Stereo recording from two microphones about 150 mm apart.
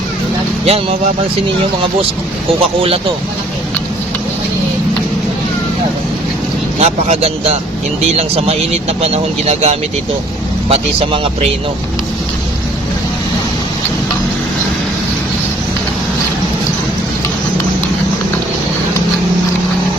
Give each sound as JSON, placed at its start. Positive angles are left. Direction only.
{"t": 0.6, "sound": "speech", "side_deg": -40}
{"t": 6.7, "sound": "speech", "side_deg": -45}